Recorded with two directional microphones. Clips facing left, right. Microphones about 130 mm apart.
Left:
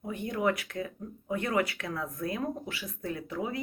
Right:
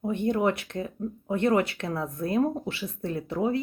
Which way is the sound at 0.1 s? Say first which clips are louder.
Right 4 dB; 25° right (ahead or behind).